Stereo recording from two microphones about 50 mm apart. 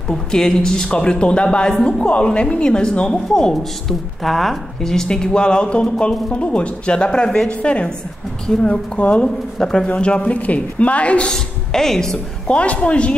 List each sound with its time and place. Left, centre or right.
0.1 s a man's voice: centre
4.2 s a man's voice: centre; by 9.2 s left
9.2 s a man's voice: centre
11.3 s a woman's voice: centre
12.4 s a woman's voice: left